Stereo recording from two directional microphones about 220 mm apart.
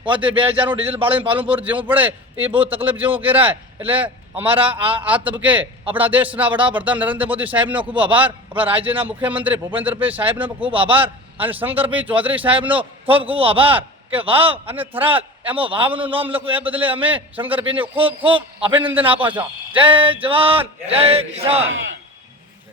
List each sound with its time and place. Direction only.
0.0 s a man's voice: 20° right (ahead or behind)
0.6 s a man's voice: 10° right (ahead or behind)
0.9 s speech: 25° right (ahead or behind)
1.5 s a man's voice: 10° right (ahead or behind)
2.4 s speech: 25° right (ahead or behind)
2.9 s a man's voice: 10° right (ahead or behind)
4.4 s speech: 25° right (ahead or behind)
5.0 s a man's voice: 5° right (ahead or behind)
10.7 s speech: 25° right (ahead or behind)
11.4 s a man's voice: 10° right (ahead or behind)
12.5 s speech: 25° right (ahead or behind)
17.3 s a man's voice: 10° right (ahead or behind)
17.6 s speech: 25° right (ahead or behind)
21.7 s a man's voice: 60° right (ahead or behind)